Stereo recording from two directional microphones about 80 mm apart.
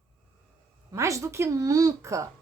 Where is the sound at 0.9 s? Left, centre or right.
Right.